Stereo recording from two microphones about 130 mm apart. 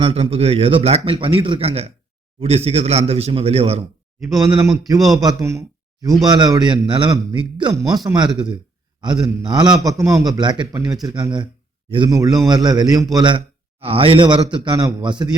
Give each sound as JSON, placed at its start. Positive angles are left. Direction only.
{"t": 0.0, "sound": "a man's voice", "side_deg": -45}
{"t": 4.2, "sound": "a man's voice", "side_deg": -25}
{"t": 7.7, "sound": "a man's voice", "side_deg": -25}
{"t": 13.8, "sound": "a man's voice", "side_deg": -45}